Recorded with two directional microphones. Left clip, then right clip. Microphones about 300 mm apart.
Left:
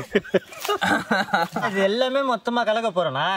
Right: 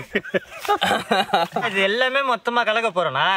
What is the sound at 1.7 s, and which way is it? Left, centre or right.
A man's voice, centre.